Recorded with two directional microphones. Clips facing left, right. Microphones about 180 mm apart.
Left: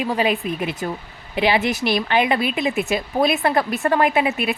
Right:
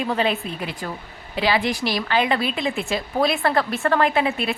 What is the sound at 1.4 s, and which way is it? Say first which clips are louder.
A woman's voice: left 2 dB; 20° left (ahead or behind).